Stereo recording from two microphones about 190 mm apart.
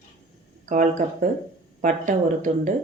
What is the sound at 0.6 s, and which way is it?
Speech, 40° right (ahead or behind).